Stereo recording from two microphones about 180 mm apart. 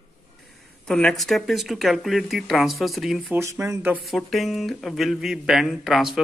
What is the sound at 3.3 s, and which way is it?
Speech, 15° right (ahead or behind).